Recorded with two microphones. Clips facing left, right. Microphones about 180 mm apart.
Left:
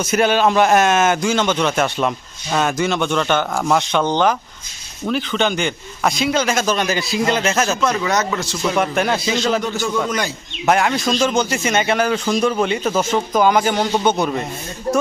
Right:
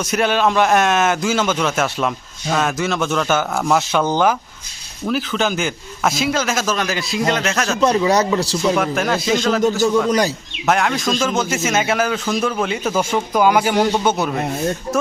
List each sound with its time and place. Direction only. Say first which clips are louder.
0.0 s a man's voice: left 2 dB; centre (ahead or behind)
7.8 s speech: right 4 dB; 35° right (ahead or behind)
8.7 s a man's voice: left 4 dB; centre (ahead or behind)
10.1 s speech: right 6 dB; 35° right (ahead or behind)
10.7 s a man's voice: left 1 dB; centre (ahead or behind)